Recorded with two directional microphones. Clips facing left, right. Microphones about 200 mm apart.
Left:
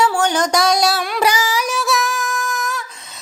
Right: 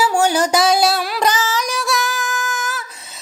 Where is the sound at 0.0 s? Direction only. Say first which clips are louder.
Right 1 dB; 10° right (ahead or behind).